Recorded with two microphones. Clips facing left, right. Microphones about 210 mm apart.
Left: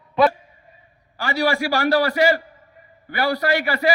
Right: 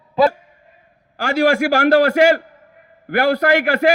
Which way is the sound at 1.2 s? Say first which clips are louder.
Right 6 dB; 45° right (ahead or behind).